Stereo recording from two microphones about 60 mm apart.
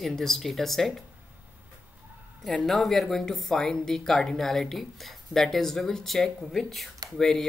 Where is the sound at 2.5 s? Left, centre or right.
Centre.